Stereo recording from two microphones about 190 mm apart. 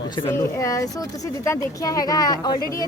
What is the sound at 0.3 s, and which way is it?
Speech, 15° left (ahead or behind).